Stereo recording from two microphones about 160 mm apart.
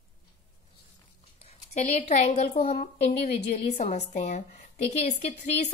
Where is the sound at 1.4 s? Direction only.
40° left (ahead or behind).